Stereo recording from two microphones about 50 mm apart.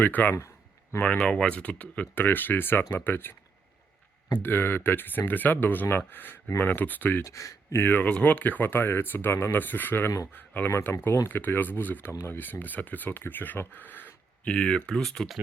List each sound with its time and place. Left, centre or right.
0.0 s speech: left
1.2 s speech: centre
2.1 s speech: left
4.4 s speech: left
7.3 s speech: left
7.8 s speech: left
10.8 s speech: left
13.7 s a sound: left
14.5 s speech: left
15.0 s speech: centre